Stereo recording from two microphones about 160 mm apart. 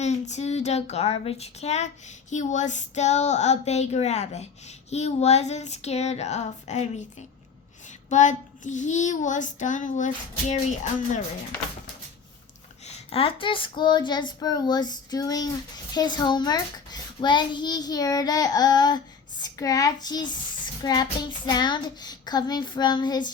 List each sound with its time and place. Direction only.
0.0 s child singing: 45° left (ahead or behind)
12.8 s a child's voice: 35° left (ahead or behind)